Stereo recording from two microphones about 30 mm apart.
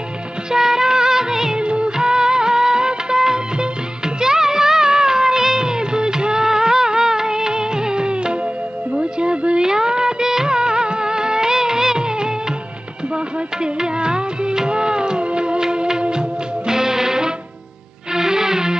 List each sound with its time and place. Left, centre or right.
0.5 s music of bollywood: centre
1.6 s music of bollywood: right
2.0 s music of bollywood: right
4.2 s music: centre; by 9.6 s right
9.6 s music of bollywood: right
13.1 s music: right